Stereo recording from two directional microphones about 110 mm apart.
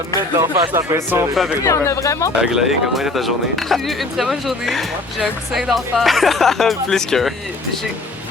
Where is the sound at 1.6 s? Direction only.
30° left (ahead or behind).